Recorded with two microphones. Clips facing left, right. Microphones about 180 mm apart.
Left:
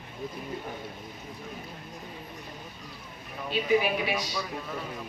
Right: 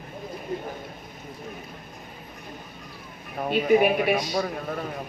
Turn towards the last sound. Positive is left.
turn(degrees=-55)  # may be behind; listen again after turning